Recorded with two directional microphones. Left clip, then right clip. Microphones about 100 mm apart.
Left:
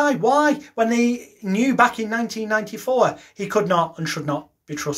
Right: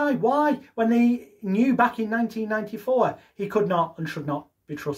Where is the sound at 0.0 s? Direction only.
35° right (ahead or behind).